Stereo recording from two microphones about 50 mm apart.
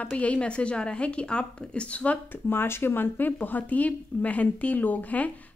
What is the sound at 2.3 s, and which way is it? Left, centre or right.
Speech, left.